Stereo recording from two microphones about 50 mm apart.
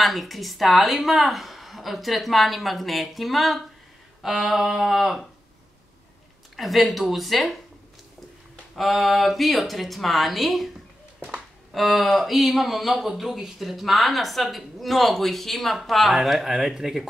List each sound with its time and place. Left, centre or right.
0.0 s speech: centre
6.5 s speech: centre
8.7 s speech: centre